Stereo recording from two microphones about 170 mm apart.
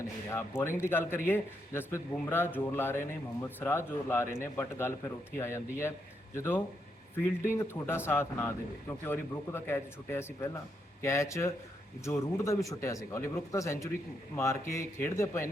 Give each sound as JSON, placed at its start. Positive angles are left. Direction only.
{"t": 0.3, "sound": "a man's voice", "side_deg": 15}